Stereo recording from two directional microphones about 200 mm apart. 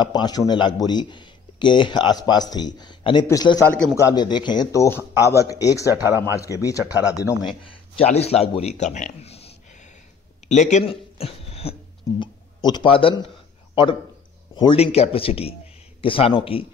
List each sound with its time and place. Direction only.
0.0 s speech: 20° left (ahead or behind)
6.0 s speech: 15° right (ahead or behind)
6.3 s speech: 15° left (ahead or behind)
7.6 s speech: 30° left (ahead or behind)
10.5 s speech: 35° left (ahead or behind)
14.5 s speech: 25° left (ahead or behind)